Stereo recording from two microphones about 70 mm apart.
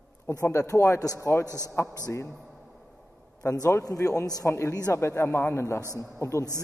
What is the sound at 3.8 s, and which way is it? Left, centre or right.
Speech, left.